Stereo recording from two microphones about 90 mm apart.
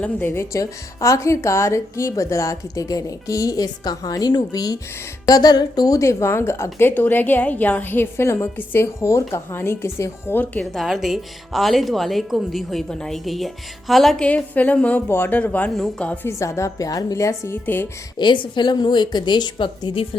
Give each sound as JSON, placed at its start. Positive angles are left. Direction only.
{"t": 0.0, "sound": "a woman's voice", "side_deg": 20}
{"t": 10.6, "sound": "speech", "side_deg": 0}
{"t": 14.3, "sound": "a woman's voice", "side_deg": 15}
{"t": 16.2, "sound": "a woman's voice", "side_deg": 35}
{"t": 17.5, "sound": "a woman's voice", "side_deg": 25}
{"t": 18.2, "sound": "a woman's voice", "side_deg": 60}